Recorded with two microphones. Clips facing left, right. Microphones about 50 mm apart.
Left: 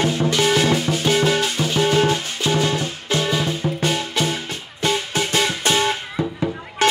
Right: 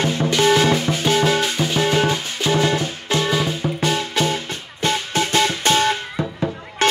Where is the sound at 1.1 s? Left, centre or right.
Right.